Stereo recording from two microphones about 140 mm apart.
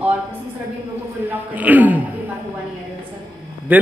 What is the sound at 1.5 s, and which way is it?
Speech, 10° right (ahead or behind).